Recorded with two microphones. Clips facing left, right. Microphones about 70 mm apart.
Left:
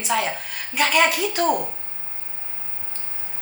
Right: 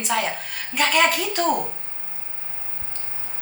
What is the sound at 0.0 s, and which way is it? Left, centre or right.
A woman's voice, centre.